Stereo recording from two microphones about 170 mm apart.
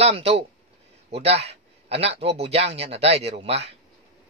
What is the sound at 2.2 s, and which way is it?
Speech, 35° right (ahead or behind).